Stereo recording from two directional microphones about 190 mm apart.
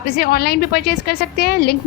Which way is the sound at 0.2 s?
55° left (ahead or behind).